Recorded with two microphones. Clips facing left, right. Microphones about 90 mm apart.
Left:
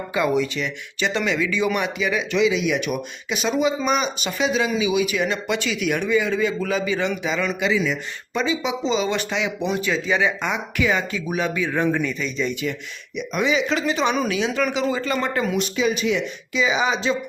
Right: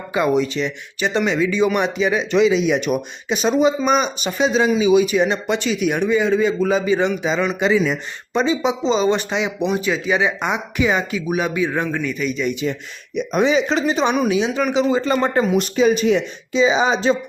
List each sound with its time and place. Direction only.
0.1 s speech: 25° right (ahead or behind)
7.6 s speech: 45° right (ahead or behind)
8.3 s speech: 30° right (ahead or behind)
11.9 s a man's voice: 5° left (ahead or behind)
12.2 s speech: 10° right (ahead or behind)
13.1 s speech: 35° right (ahead or behind)
15.5 s speech: 40° right (ahead or behind)